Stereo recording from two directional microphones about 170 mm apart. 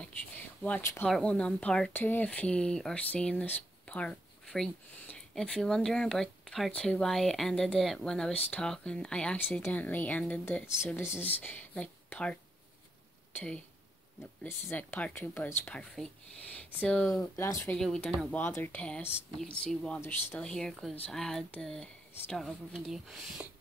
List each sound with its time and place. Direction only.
0.6 s speech: 10° left (ahead or behind)
17.1 s speech: 20° left (ahead or behind)
17.7 s speech: 5° left (ahead or behind)